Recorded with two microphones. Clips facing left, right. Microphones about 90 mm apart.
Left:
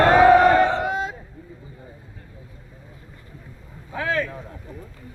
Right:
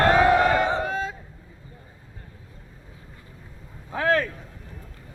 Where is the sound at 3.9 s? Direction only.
40° right (ahead or behind).